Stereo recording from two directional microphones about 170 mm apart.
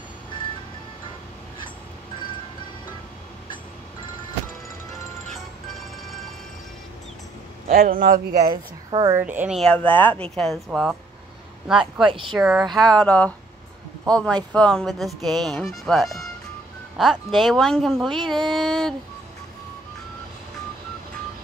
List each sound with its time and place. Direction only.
5.7 s music: centre (ahead or behind)
7.6 s speech: 55° right (ahead or behind)
8.9 s a woman's voice: 20° right (ahead or behind)
9.6 s speech: 5° left (ahead or behind)
12.1 s speech: 30° right (ahead or behind)
12.4 s speech: 5° right (ahead or behind)